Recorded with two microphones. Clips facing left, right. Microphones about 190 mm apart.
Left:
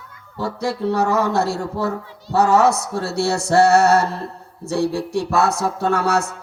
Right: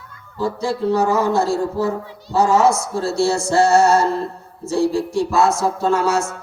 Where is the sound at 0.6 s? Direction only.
65° left (ahead or behind).